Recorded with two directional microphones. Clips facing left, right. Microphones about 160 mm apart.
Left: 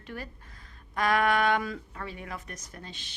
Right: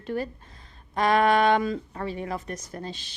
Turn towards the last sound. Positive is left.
turn(degrees=-35)  # may be behind; listen again after turning